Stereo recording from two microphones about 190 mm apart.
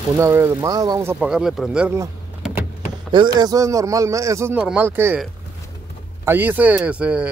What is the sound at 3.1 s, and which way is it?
A man's voice, 25° right (ahead or behind).